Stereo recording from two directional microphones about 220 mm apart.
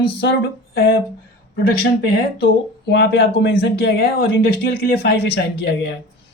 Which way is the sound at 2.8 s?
55° left (ahead or behind).